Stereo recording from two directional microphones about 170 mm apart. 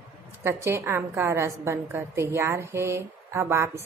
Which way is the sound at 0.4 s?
15° right (ahead or behind).